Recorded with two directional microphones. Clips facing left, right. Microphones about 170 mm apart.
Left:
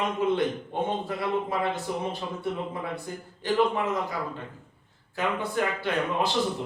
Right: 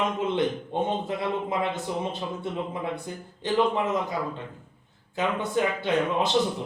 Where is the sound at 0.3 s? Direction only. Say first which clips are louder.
Right 2 dB; 20° right (ahead or behind).